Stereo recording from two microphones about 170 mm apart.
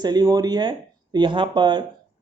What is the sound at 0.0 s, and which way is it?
Speech, 25° right (ahead or behind).